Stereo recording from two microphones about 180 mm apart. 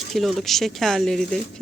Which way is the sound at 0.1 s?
Centre (ahead or behind).